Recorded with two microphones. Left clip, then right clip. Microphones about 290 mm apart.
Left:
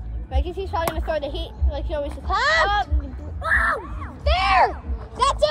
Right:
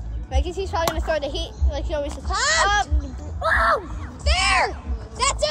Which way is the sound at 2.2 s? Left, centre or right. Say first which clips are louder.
Left 2 dB; centre.